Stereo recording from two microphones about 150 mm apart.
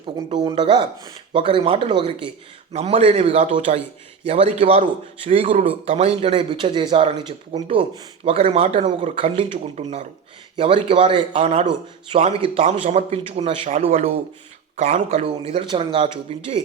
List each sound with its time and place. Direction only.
0.0 s a man's voice: 35° right (ahead or behind)
15.5 s a man's voice: 35° right (ahead or behind)